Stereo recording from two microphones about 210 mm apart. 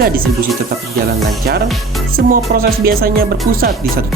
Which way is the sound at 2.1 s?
45° right (ahead or behind).